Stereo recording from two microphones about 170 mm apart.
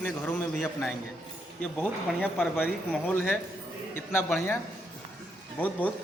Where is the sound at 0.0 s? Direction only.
5° left (ahead or behind).